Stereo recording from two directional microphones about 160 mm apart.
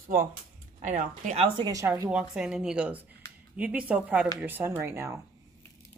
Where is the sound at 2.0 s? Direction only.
5° right (ahead or behind).